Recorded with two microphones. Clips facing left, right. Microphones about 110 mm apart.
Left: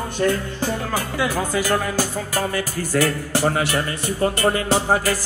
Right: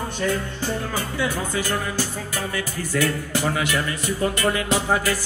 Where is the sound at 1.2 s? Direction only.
90° left.